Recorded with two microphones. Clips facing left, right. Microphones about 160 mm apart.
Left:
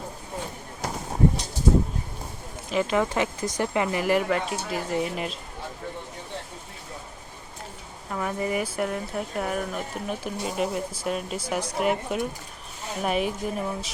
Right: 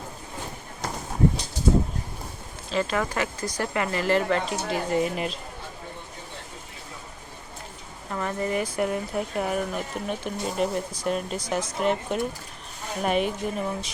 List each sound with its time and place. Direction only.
2.6 s speech: 15° left (ahead or behind); by 5.4 s centre (ahead or behind)
8.1 s speech: 10° left (ahead or behind)